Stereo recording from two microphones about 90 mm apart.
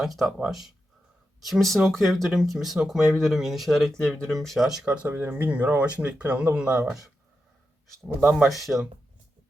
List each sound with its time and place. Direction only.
0.0 s speech: centre (ahead or behind)
5.0 s speech: 20° right (ahead or behind)
8.4 s speech: centre (ahead or behind)